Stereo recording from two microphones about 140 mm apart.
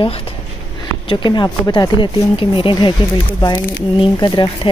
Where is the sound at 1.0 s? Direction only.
35° left (ahead or behind).